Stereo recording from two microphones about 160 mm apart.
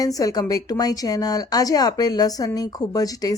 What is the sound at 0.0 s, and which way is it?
Speech, 20° left (ahead or behind).